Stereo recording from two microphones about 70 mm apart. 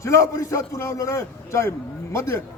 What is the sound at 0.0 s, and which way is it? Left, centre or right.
A man's voice, left.